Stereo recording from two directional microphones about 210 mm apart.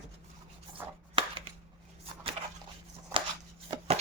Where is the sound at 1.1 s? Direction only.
25° right (ahead or behind).